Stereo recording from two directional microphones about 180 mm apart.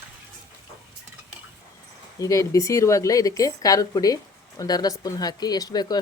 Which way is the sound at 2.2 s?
20° left (ahead or behind).